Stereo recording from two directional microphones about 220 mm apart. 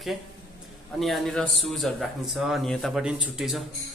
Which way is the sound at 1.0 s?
Centre (ahead or behind).